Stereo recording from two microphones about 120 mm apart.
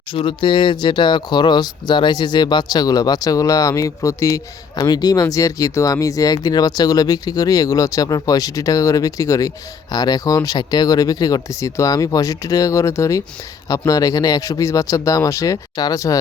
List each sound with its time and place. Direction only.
0.1 s speech: 45° left (ahead or behind); by 16.1 s 30° left (ahead or behind)